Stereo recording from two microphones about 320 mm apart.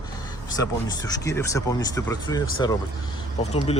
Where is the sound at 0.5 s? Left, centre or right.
Centre.